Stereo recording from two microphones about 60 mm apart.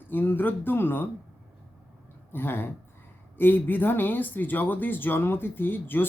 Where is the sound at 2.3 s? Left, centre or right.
Left.